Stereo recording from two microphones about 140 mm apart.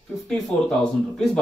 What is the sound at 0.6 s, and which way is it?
Speech, 5° left (ahead or behind).